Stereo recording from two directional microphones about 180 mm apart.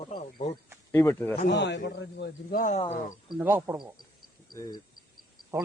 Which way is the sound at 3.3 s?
10° right (ahead or behind).